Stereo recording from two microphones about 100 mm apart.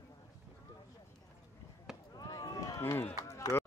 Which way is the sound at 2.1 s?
40° left (ahead or behind).